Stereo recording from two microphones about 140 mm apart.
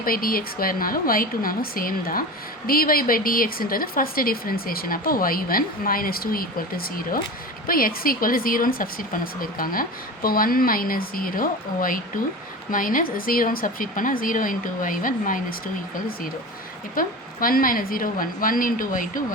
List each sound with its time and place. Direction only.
0.0 s a woman's voice: 90° left; by 19.2 s 75° left (ahead or behind)